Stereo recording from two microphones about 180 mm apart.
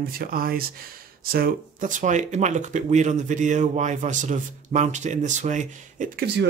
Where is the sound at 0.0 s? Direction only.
55° right (ahead or behind).